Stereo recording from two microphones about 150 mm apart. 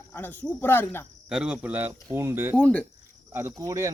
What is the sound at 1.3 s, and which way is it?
Speech, 5° right (ahead or behind).